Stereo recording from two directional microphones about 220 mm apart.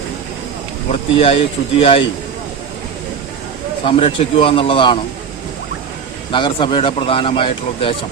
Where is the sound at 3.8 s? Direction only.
25° left (ahead or behind).